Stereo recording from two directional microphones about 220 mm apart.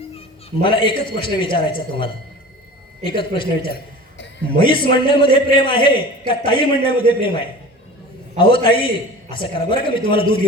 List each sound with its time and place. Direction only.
0.6 s a man's voice: 20° left (ahead or behind)
3.1 s a man's voice: 25° left (ahead or behind)